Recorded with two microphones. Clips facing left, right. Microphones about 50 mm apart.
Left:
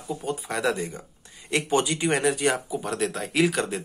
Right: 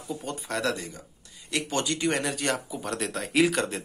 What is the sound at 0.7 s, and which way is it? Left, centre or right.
A man's voice, left.